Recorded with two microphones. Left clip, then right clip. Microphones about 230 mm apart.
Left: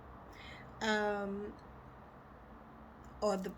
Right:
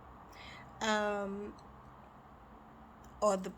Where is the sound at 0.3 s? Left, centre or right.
Right.